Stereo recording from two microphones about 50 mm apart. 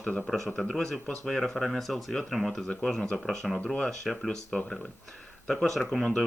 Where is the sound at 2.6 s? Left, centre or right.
Centre.